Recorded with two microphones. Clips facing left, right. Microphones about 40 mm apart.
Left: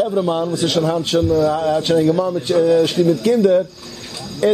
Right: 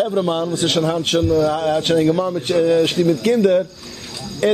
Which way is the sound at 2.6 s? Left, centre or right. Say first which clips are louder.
Left 1 dB; centre.